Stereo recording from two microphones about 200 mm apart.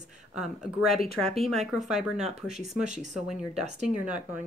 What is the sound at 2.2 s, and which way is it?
Speech, 35° right (ahead or behind).